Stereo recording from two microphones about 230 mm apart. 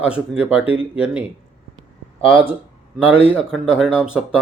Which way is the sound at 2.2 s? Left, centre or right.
Left.